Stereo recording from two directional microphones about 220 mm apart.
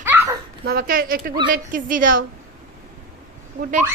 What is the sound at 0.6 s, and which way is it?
A woman's voice, 45° right (ahead or behind).